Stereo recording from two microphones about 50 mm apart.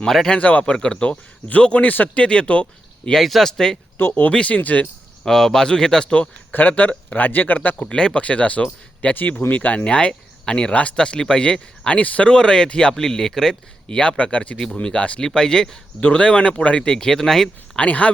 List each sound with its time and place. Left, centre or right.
0.0 s speech: centre
0.3 s speech: left
0.6 s speech: centre
1.8 s a man's voice: left
2.1 s speech: centre
3.1 s speech: centre
3.9 s speech: left
4.3 s speech: left
4.5 s a man's voice: left
5.2 s speech: centre
6.5 s a man's voice: left
7.9 s speech: centre
17.7 s speech: left